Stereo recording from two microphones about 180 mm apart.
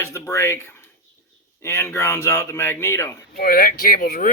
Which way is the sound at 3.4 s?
55° left (ahead or behind).